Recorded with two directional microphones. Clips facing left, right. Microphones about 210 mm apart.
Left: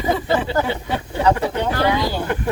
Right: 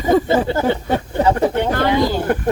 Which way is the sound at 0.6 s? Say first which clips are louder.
Right 6 dB; 45° right (ahead or behind).